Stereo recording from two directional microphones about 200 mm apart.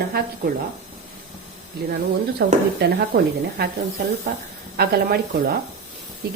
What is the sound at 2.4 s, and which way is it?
A woman's voice, 60° right (ahead or behind).